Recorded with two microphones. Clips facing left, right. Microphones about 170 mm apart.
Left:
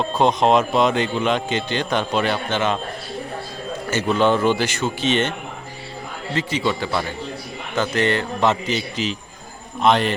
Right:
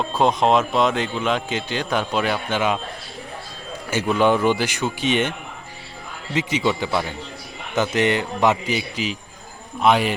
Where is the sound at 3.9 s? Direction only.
10° right (ahead or behind).